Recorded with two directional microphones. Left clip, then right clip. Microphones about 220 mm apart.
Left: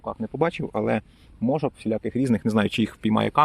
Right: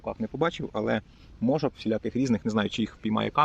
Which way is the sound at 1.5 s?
25° left (ahead or behind).